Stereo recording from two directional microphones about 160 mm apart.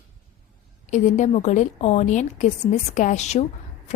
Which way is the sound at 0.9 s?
50° left (ahead or behind).